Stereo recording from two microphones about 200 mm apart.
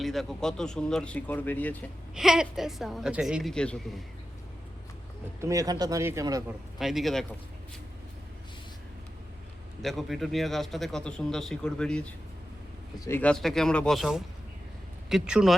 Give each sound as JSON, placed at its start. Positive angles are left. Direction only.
{"t": 0.0, "sound": "a man's voice", "side_deg": 0}
{"t": 2.1, "sound": "a man's voice", "side_deg": -5}
{"t": 5.4, "sound": "speech", "side_deg": -15}
{"t": 6.7, "sound": "a man's voice", "side_deg": 0}
{"t": 9.8, "sound": "a man's voice", "side_deg": 0}